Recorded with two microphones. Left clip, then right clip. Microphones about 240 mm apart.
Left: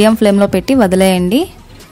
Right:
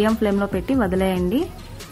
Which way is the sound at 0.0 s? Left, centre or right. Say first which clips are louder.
Left 10 dB; left.